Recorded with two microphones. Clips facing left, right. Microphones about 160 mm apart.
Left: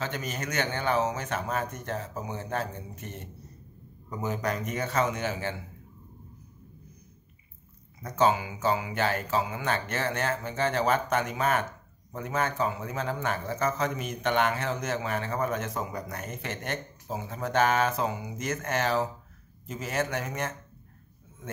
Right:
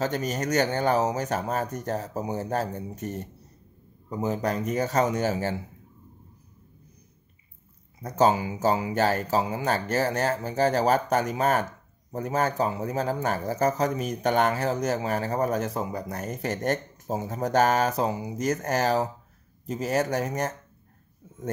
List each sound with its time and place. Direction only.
0.0 s speech: 40° right (ahead or behind)
8.0 s speech: 35° right (ahead or behind)